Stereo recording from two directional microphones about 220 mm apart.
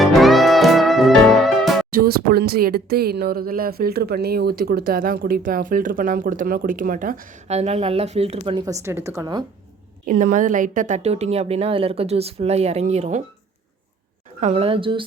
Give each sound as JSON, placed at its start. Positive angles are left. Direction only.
{"t": 0.0, "sound": "music", "side_deg": 0}
{"t": 1.9, "sound": "speech", "side_deg": -40}
{"t": 10.1, "sound": "a woman's voice", "side_deg": -40}
{"t": 14.4, "sound": "a woman's voice", "side_deg": -25}